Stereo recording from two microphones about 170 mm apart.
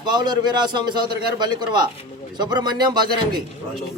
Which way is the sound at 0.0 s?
25° right (ahead or behind).